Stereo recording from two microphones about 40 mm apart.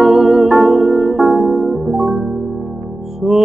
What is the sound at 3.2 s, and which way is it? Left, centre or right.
Music, centre.